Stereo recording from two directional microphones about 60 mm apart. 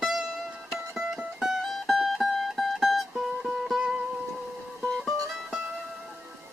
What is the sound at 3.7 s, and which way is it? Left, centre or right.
Music, centre.